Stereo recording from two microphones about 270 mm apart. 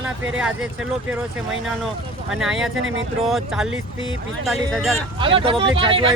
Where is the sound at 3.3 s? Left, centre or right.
Centre.